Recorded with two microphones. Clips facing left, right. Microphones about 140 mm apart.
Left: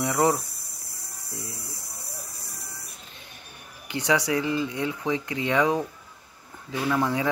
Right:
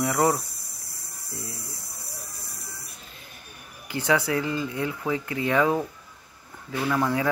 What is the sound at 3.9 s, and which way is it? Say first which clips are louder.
Speech: even; 15° left (ahead or behind).